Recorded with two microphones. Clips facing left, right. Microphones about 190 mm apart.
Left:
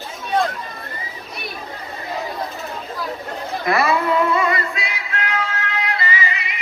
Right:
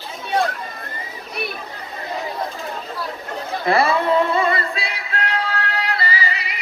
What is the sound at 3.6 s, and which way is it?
Music, 30° right (ahead or behind).